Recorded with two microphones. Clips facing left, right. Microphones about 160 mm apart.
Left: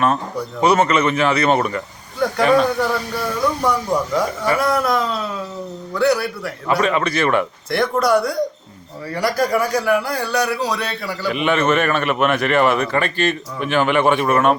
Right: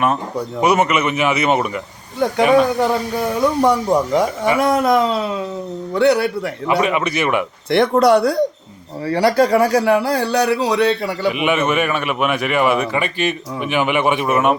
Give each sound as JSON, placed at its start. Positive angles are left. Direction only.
{"t": 0.0, "sound": "a man's voice", "side_deg": -15}
{"t": 7.7, "sound": "speech", "side_deg": -25}
{"t": 11.3, "sound": "a man's voice", "side_deg": -10}